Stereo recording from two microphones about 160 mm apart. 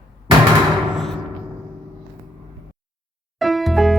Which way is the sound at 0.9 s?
Centre (ahead or behind).